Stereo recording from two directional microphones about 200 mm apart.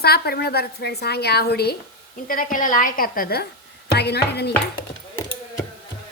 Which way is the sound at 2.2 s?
45° left (ahead or behind).